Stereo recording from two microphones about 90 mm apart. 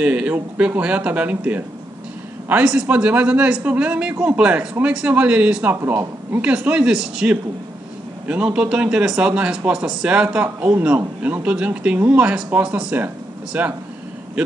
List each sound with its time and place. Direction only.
0.0 s speech: 10° right (ahead or behind)
2.6 s speech: 10° right (ahead or behind)